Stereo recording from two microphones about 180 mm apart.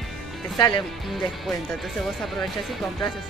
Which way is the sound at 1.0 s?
Centre (ahead or behind).